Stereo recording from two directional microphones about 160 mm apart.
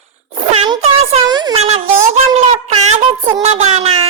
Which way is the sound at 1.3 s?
25° right (ahead or behind).